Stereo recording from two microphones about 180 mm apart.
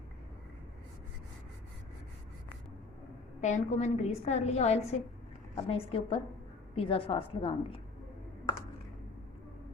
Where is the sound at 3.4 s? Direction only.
40° left (ahead or behind).